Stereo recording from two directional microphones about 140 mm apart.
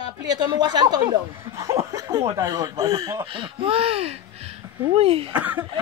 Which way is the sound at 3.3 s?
40° right (ahead or behind).